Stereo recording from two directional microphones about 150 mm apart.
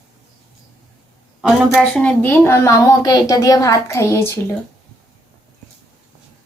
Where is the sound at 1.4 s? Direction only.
5° right (ahead or behind).